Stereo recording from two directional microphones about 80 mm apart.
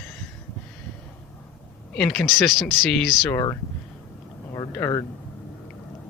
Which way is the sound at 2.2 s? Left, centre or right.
Centre.